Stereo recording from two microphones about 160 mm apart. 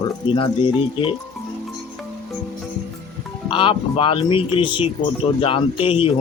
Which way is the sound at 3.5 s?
30° left (ahead or behind).